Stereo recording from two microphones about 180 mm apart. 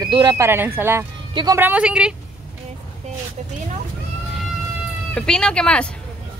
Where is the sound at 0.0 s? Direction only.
25° right (ahead or behind).